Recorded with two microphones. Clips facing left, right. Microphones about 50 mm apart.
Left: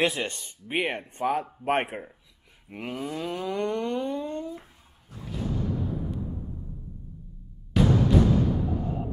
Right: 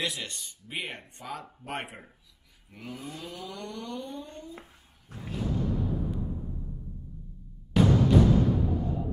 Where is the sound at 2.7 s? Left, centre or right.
Left.